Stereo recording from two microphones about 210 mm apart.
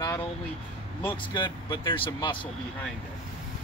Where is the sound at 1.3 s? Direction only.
20° left (ahead or behind).